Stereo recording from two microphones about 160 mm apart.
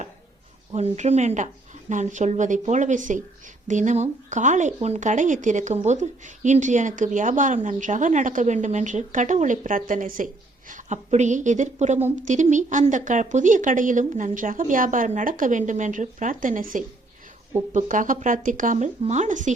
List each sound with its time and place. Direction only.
0.7 s speech: 40° right (ahead or behind)